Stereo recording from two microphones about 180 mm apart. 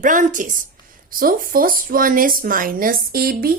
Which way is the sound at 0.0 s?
45° right (ahead or behind).